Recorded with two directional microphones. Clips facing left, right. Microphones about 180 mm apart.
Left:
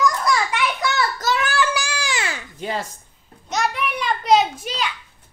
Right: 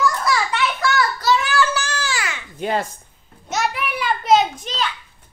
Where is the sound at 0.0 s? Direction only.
5° right (ahead or behind).